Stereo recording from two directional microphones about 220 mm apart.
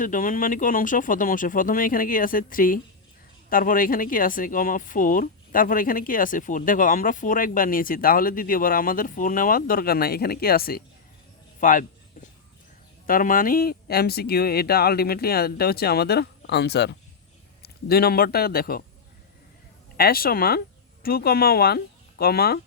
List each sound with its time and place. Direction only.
0.0 s speech: 35° left (ahead or behind)
11.6 s a sound: 35° left (ahead or behind)
13.1 s a man's voice: 40° left (ahead or behind)
20.0 s speech: 40° left (ahead or behind)